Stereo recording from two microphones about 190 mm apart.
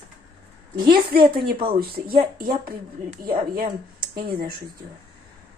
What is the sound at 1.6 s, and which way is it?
Speech, 50° right (ahead or behind).